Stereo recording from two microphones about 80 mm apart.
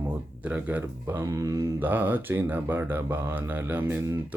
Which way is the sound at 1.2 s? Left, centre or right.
Right.